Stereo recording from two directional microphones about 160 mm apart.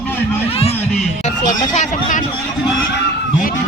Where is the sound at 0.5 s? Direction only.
40° left (ahead or behind).